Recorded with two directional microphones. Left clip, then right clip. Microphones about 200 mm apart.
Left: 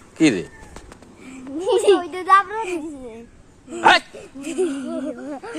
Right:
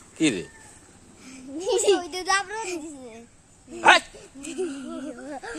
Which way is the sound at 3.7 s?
15° left (ahead or behind).